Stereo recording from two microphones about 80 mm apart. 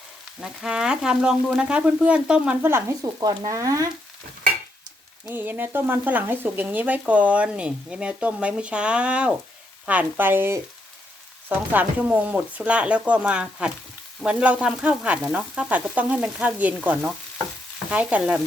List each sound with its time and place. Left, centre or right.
0.3 s frying: centre
3.0 s speech: right
5.3 s speech: right
7.0 s frying: centre
9.8 s speech: centre
11.4 s frying: right
17.0 s stir: centre
17.9 s frying: centre